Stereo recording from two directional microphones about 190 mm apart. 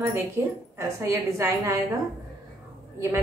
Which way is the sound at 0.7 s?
15° right (ahead or behind).